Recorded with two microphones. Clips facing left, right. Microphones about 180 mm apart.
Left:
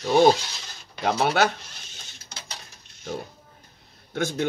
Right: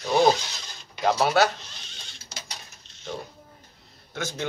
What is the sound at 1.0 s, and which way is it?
Speech, 55° left (ahead or behind).